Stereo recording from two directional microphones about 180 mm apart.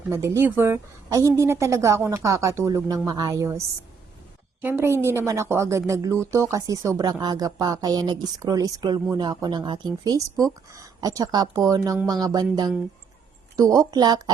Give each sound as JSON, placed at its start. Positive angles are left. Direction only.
{"t": 0.1, "sound": "a woman's voice", "side_deg": -15}
{"t": 4.6, "sound": "a woman's voice", "side_deg": -10}